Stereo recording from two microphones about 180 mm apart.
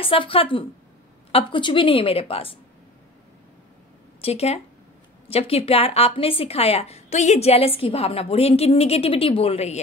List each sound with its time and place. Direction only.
0.0 s a woman's voice: 30° left (ahead or behind)
4.2 s speech: 35° left (ahead or behind)